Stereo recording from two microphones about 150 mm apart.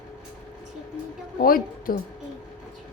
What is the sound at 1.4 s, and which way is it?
Speech, 75° left (ahead or behind).